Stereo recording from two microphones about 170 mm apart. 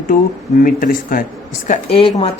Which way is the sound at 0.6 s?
55° left (ahead or behind).